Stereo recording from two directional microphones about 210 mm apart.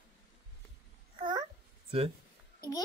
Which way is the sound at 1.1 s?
20° right (ahead or behind).